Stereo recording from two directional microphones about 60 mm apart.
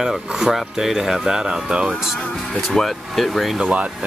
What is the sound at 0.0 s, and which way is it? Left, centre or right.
Speech, centre.